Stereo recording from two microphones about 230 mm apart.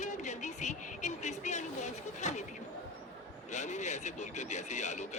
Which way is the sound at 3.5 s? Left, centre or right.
Left.